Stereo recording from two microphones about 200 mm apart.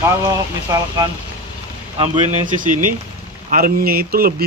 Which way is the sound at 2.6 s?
40° right (ahead or behind).